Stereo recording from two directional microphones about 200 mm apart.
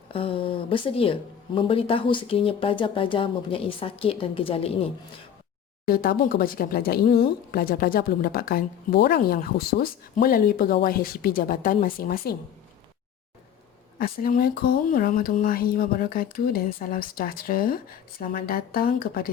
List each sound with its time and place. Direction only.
0.1 s a woman's voice: 25° left (ahead or behind)
5.8 s a woman's voice: 50° left (ahead or behind)
14.0 s a woman's voice: 45° left (ahead or behind)